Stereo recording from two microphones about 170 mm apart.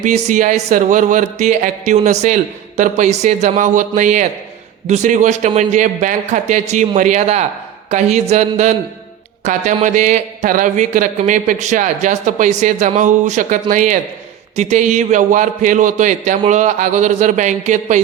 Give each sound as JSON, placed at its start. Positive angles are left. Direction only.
{"t": 0.0, "sound": "a man's voice", "side_deg": -45}
{"t": 7.9, "sound": "a sound", "side_deg": -40}
{"t": 9.4, "sound": "a man's voice", "side_deg": -45}